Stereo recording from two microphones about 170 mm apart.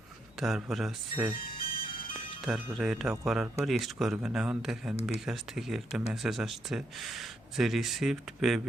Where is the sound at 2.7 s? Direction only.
Centre (ahead or behind).